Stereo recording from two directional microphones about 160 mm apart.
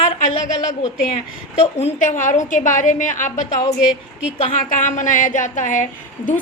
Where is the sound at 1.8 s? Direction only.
45° left (ahead or behind).